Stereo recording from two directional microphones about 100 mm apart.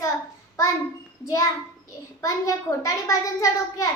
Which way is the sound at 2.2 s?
30° left (ahead or behind).